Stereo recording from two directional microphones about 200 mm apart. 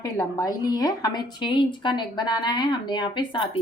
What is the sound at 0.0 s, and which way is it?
A woman's voice, 15° left (ahead or behind).